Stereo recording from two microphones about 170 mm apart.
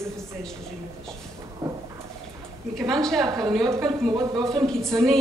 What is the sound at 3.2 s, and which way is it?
Speech, 20° right (ahead or behind).